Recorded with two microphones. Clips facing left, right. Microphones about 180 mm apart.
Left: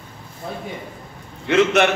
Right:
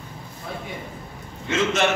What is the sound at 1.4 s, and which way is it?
Speech, 60° left (ahead or behind).